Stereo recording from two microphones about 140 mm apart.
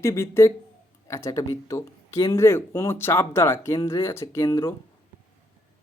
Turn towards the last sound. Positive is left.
turn(degrees=20)  # may be behind; listen again after turning